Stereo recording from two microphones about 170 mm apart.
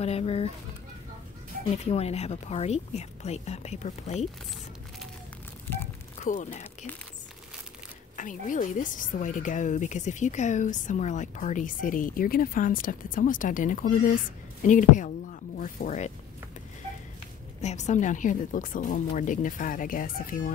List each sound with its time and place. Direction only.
0.0 s a woman's voice: 35° left (ahead or behind)
1.9 s a woman's voice: 40° left (ahead or behind)
6.2 s speech: 45° left (ahead or behind)
8.2 s speech: 50° left (ahead or behind)
17.6 s speech: 45° left (ahead or behind)